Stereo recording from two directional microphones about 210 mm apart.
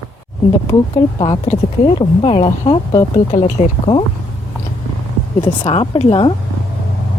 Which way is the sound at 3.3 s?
35° left (ahead or behind).